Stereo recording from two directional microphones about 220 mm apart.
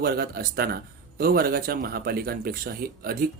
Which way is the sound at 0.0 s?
45° right (ahead or behind).